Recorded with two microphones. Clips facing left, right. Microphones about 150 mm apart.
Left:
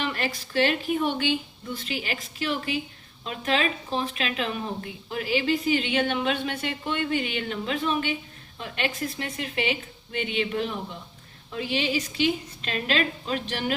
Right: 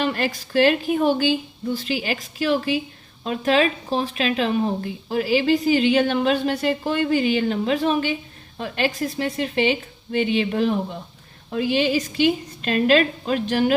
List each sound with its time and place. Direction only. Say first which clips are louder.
0.0 s a woman's voice: right 6 dB; 40° right (ahead or behind)